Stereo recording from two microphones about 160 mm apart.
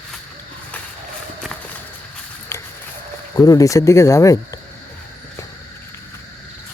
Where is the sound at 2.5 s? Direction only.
20° left (ahead or behind).